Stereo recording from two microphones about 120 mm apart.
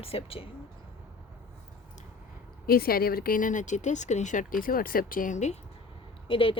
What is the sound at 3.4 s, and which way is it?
Speech, 90° left.